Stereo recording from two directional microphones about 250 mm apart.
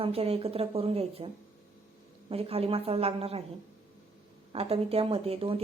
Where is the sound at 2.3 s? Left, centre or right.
Right.